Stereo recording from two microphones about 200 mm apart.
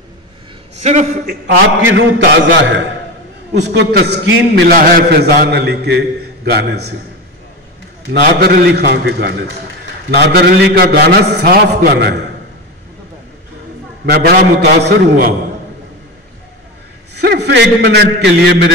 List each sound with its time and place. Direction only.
0.7 s a man's voice: 35° right (ahead or behind)
1.9 s a man's voice: 70° right (ahead or behind)
8.1 s a man's voice: 55° right (ahead or behind)
14.0 s a man's voice: 50° right (ahead or behind)
17.1 s a man's voice: 55° right (ahead or behind)